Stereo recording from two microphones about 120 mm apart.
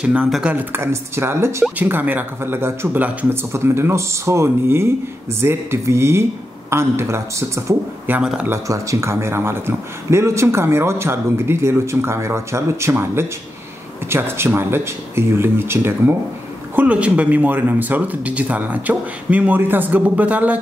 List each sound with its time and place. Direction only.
0.0 s speech: 10° right (ahead or behind)
8.2 s speech: 5° right (ahead or behind)
8.5 s speech: 25° right (ahead or behind)